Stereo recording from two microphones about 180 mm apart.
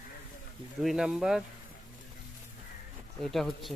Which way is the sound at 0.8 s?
Centre (ahead or behind).